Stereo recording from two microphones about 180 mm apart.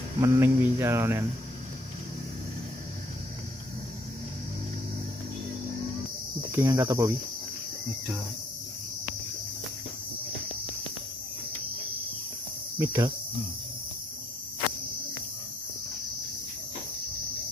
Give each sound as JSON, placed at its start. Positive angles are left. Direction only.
{"t": 0.2, "sound": "cricket", "side_deg": -15}
{"t": 6.5, "sound": "cricket", "side_deg": -15}
{"t": 12.7, "sound": "cricket", "side_deg": -15}